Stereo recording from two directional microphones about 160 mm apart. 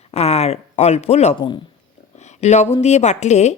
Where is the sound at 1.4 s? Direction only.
30° left (ahead or behind).